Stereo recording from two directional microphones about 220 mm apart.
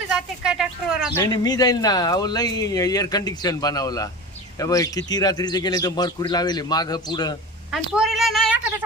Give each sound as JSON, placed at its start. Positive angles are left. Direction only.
{"t": 0.1, "sound": "speech", "side_deg": -5}
{"t": 1.1, "sound": "speech", "side_deg": 15}
{"t": 7.7, "sound": "a woman's voice", "side_deg": 0}